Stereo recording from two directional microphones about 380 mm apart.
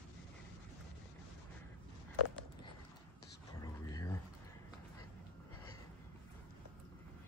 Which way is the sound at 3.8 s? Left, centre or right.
Centre.